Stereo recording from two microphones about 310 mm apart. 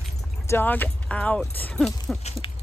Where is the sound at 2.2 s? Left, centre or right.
Centre.